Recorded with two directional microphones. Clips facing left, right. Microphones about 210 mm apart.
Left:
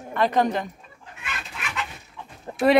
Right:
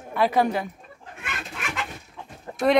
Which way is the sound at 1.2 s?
50° right (ahead or behind).